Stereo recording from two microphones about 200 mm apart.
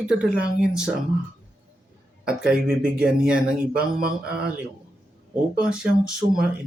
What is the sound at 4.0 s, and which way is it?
Speech, 50° right (ahead or behind).